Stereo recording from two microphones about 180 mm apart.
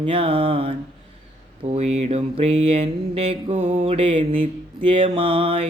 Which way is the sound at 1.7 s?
35° right (ahead or behind).